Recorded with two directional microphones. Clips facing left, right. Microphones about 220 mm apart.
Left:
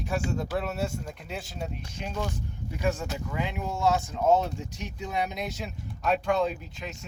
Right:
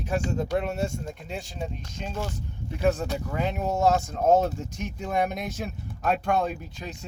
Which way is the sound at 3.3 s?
45° right (ahead or behind).